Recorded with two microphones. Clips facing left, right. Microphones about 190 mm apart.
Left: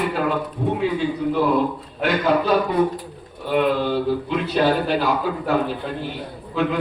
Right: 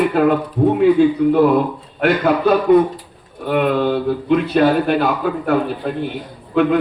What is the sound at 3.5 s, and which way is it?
A man's voice, 55° right (ahead or behind).